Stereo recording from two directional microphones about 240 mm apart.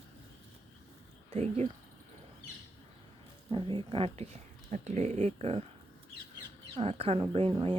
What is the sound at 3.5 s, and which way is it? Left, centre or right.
Speech, right.